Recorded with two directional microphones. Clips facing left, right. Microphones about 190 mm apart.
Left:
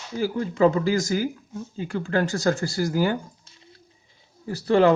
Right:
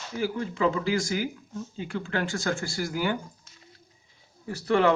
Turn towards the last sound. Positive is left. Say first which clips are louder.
# left 4 dB
turn(degrees=35)  # may be behind; listen again after turning